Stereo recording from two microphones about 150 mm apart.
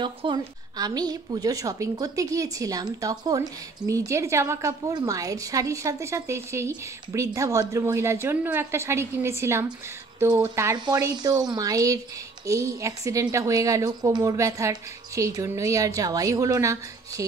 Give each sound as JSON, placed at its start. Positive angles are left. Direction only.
{"t": 0.0, "sound": "a woman's voice", "side_deg": -30}